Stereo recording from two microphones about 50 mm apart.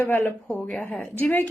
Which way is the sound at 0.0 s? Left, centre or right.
Left.